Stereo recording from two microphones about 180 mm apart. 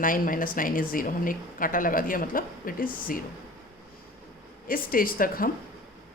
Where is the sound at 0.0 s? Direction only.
50° left (ahead or behind).